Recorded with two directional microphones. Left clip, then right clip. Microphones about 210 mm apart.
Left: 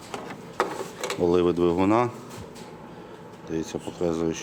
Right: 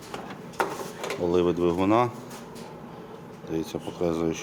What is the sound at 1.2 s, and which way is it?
Speech, 30° left (ahead or behind).